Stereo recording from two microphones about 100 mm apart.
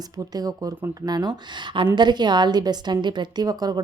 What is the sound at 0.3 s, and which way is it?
A woman's voice, 40° right (ahead or behind).